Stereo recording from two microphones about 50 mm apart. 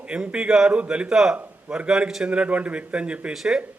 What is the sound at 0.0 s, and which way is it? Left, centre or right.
A man's voice, right.